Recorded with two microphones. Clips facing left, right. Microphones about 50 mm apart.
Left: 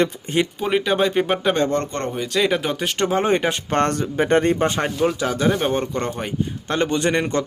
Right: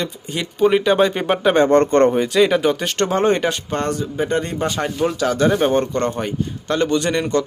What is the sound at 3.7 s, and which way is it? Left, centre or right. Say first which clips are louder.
Speech: left 2 dB; left.